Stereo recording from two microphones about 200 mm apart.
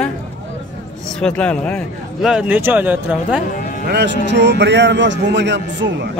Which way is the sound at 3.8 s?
55° right (ahead or behind).